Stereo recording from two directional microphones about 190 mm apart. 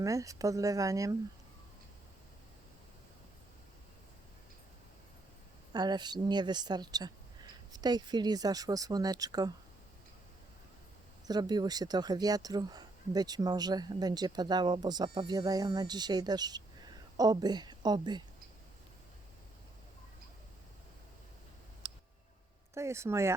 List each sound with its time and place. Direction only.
0.0 s speech: 15° right (ahead or behind)
5.7 s speech: 20° right (ahead or behind)
11.3 s speech: 20° right (ahead or behind)
22.7 s speech: 15° right (ahead or behind)